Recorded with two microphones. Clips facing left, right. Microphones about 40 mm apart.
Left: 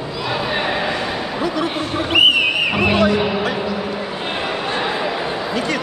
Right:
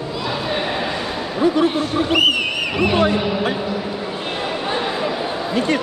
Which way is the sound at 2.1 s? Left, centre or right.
Centre.